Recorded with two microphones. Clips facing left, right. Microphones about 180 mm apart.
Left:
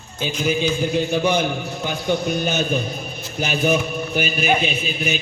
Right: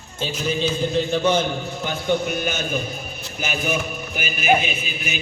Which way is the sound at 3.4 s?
40° left (ahead or behind).